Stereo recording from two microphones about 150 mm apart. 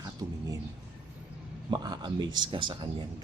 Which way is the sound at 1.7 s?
25° right (ahead or behind).